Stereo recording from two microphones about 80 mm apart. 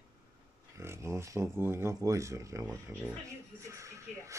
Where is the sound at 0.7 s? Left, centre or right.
Right.